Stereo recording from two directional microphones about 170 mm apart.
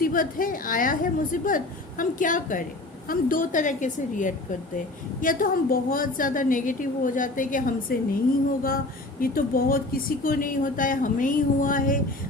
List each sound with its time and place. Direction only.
0.0 s speech: 55° left (ahead or behind)
9.2 s speech: 60° left (ahead or behind)